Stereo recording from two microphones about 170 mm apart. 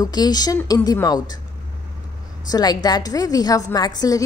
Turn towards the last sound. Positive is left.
turn(degrees=20)  # may be behind; listen again after turning